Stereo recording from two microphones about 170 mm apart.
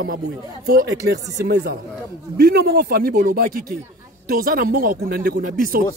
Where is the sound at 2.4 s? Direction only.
70° right (ahead or behind).